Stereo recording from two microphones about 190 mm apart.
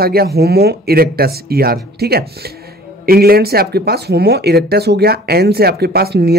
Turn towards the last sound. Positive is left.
turn(degrees=-55)  # may be behind; listen again after turning